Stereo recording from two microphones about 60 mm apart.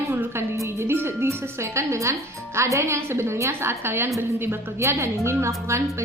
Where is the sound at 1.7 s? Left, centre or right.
Right.